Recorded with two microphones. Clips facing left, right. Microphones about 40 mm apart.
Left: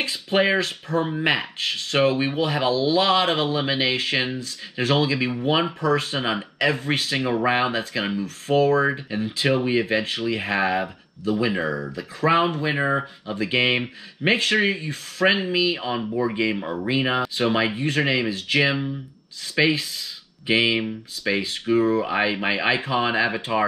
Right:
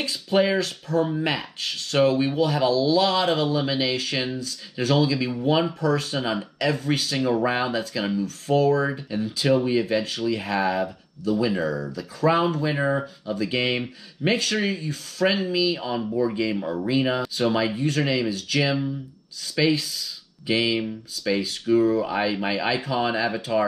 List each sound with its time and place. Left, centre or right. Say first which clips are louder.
0.0 s speech: even; left